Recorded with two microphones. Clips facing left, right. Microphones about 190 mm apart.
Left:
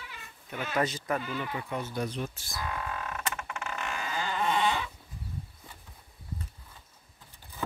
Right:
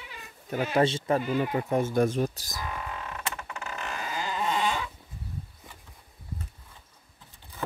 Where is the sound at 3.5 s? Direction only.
35° right (ahead or behind).